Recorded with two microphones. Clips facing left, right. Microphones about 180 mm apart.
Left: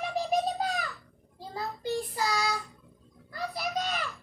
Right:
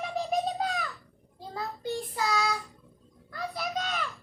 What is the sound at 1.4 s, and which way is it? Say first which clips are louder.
Child singing: even; 5° left (ahead or behind).